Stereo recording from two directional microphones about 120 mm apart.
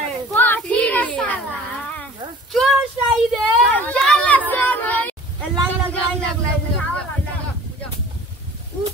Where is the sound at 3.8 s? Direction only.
10° left (ahead or behind).